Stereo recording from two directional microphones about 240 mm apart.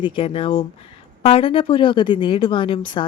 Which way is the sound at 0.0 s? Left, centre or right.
Left.